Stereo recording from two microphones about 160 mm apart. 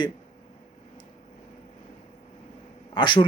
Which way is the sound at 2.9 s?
30° left (ahead or behind).